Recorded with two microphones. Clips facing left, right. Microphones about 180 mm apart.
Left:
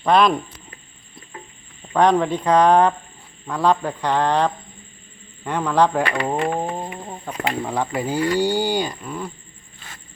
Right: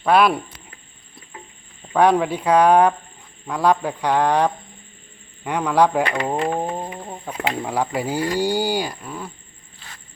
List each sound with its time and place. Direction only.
0.0 s speech: 5° right (ahead or behind)
1.9 s speech: 10° right (ahead or behind)
6.6 s speech: 5° right (ahead or behind)